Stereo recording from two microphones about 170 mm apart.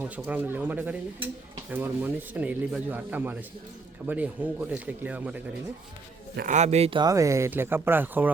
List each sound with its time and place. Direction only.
0.0 s speech: 10° right (ahead or behind)
6.3 s a man's voice: 50° right (ahead or behind)
7.0 s speech: 20° right (ahead or behind)